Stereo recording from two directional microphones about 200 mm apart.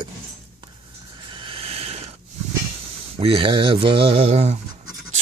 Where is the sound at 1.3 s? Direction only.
25° right (ahead or behind).